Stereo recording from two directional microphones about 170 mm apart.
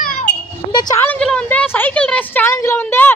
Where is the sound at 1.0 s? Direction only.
5° left (ahead or behind).